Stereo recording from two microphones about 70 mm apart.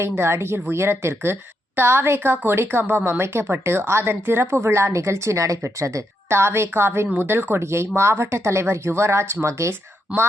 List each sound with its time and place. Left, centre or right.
0.2 s a woman's voice: right
6.2 s a woman's voice: right